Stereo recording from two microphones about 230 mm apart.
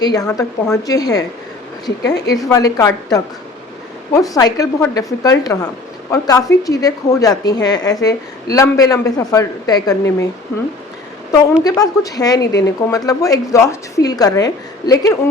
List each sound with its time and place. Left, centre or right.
0.0 s a woman's voice: centre
2.2 s a woman's voice: centre
11.6 s a woman's voice: centre